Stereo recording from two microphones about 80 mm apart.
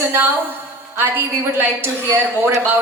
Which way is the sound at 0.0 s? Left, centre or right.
Right.